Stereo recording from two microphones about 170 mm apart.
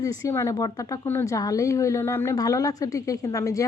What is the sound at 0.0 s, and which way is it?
Speech, 20° left (ahead or behind).